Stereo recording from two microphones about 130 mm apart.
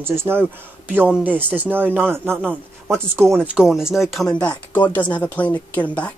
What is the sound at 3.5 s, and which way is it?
Speech, 5° right (ahead or behind).